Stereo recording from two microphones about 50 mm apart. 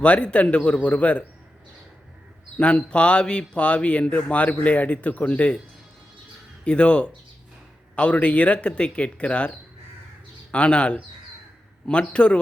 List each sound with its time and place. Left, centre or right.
0.0 s speech: left
2.6 s speech: left
6.7 s speech: left